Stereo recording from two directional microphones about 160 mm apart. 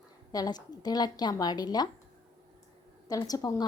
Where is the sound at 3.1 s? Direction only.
20° left (ahead or behind).